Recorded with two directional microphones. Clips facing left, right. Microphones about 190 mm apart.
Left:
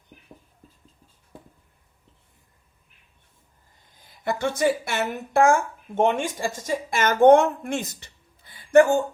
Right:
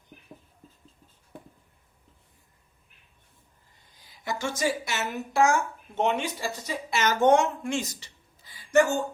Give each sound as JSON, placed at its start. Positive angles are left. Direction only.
{"t": 3.9, "sound": "a woman's voice", "side_deg": 55}